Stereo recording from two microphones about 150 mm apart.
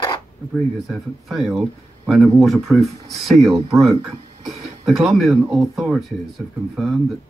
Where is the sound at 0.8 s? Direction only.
Centre (ahead or behind).